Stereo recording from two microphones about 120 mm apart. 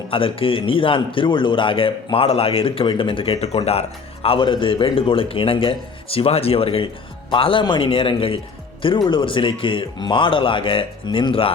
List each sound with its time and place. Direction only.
0.1 s a man's voice: 50° left (ahead or behind)